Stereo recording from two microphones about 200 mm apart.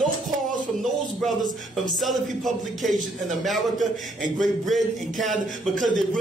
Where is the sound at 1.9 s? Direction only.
Centre (ahead or behind).